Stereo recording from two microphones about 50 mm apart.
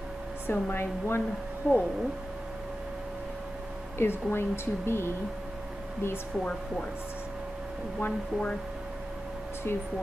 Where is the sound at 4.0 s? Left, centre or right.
Left.